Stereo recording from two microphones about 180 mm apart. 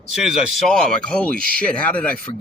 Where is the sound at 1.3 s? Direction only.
55° right (ahead or behind).